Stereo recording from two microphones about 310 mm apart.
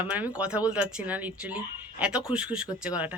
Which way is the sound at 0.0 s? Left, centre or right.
Centre.